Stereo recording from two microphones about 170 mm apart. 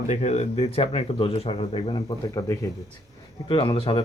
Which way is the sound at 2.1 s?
20° left (ahead or behind).